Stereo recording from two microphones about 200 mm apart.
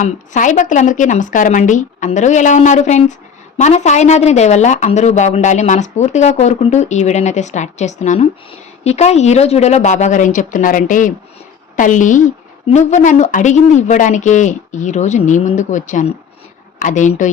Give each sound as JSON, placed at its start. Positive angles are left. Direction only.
{"t": 0.0, "sound": "speech", "side_deg": 40}